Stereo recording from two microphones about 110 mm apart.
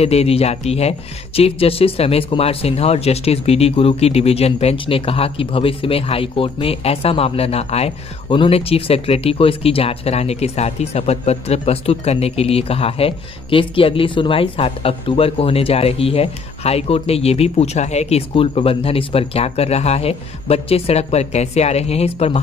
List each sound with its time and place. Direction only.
0.0 s speech: 70° left (ahead or behind)